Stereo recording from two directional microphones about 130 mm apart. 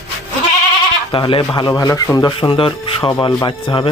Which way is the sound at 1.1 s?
40° left (ahead or behind).